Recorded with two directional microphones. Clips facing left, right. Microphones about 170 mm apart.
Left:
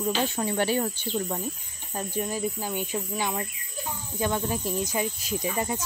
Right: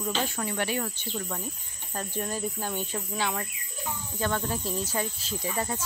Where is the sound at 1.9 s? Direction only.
10° left (ahead or behind).